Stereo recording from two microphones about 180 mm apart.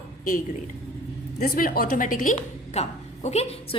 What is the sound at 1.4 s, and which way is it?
Speech, 55° left (ahead or behind).